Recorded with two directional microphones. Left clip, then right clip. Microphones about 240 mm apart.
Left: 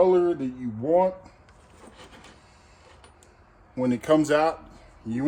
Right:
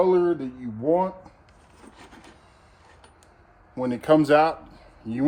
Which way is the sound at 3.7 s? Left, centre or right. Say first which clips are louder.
Right 2 dB; centre.